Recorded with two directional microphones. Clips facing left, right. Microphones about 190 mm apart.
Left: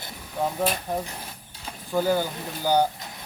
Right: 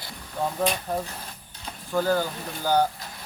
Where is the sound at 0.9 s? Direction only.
15° left (ahead or behind).